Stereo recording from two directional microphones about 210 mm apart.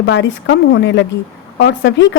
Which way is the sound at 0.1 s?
60° left (ahead or behind).